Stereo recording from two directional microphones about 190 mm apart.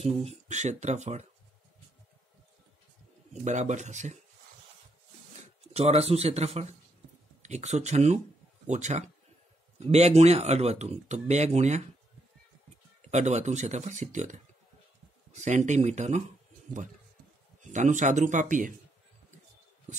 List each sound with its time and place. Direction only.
0.0 s speech: 35° right (ahead or behind)
3.4 s speech: 40° right (ahead or behind)
5.8 s speech: 35° right (ahead or behind)
13.1 s speech: 35° right (ahead or behind)
17.6 s speech: 40° right (ahead or behind)